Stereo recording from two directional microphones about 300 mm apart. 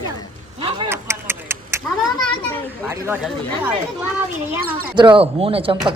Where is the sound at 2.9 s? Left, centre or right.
Centre.